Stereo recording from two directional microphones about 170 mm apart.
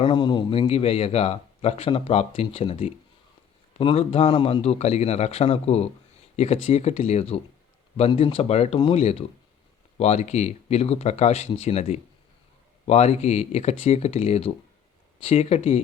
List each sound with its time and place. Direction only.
0.0 s speech: 30° left (ahead or behind)